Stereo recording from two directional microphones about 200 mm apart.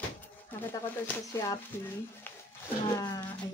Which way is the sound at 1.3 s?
15° left (ahead or behind).